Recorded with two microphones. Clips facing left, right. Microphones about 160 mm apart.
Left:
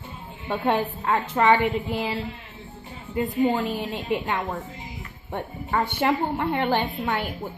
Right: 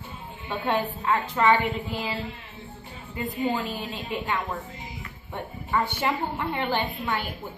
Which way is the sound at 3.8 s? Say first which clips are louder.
Left 5 dB; 55° left (ahead or behind).